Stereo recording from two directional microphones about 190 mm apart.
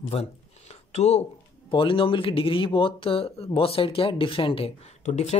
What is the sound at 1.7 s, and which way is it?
Speech, 25° left (ahead or behind).